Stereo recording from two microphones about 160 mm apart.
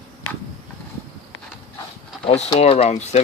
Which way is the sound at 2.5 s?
40° left (ahead or behind).